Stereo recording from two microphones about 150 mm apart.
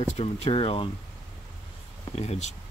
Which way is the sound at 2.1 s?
45° left (ahead or behind).